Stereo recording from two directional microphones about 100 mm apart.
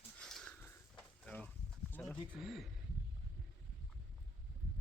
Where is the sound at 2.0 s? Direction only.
10° left (ahead or behind).